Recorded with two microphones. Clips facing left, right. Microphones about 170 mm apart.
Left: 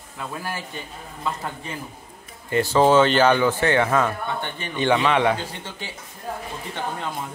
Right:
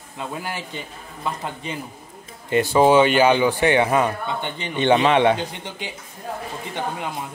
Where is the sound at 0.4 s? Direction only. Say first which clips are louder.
Right 1 dB; 20° right (ahead or behind).